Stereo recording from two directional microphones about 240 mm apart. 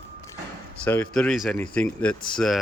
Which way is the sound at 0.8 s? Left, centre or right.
Centre.